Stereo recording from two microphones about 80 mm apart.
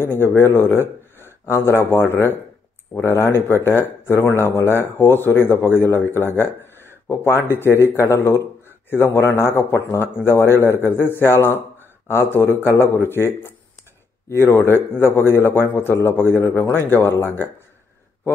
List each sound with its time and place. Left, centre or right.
0.0 s a man's voice: left